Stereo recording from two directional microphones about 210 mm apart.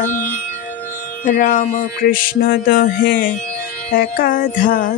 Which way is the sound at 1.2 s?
40° left (ahead or behind).